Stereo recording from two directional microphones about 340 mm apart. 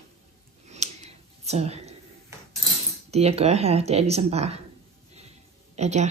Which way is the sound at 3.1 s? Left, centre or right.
Centre.